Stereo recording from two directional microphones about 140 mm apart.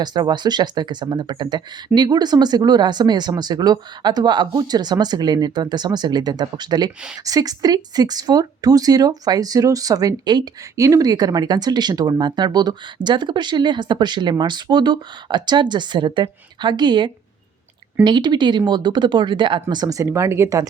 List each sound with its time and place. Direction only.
0.0 s speech: 30° right (ahead or behind)